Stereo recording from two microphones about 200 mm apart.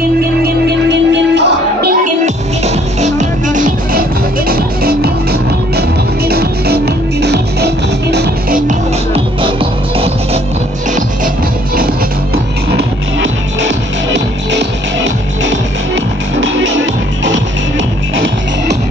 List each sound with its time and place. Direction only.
0.2 s music: 50° right (ahead or behind)
8.6 s music: 30° right (ahead or behind)
12.7 s music: 65° right (ahead or behind)
16.3 s music: 65° right (ahead or behind)